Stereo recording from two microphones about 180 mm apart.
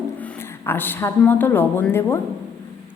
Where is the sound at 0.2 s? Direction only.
10° left (ahead or behind).